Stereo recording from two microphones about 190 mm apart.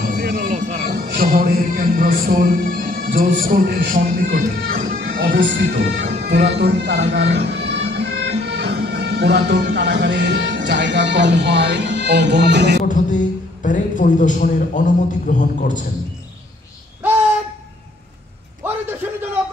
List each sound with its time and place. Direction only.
0.0 s music: 50° right (ahead or behind); by 0.9 s 35° right (ahead or behind)
1.0 s a man's voice: 50° right (ahead or behind)
5.4 s speech: 65° right (ahead or behind)
7.2 s music: 65° right (ahead or behind)
12.8 s a man's voice: 40° left (ahead or behind)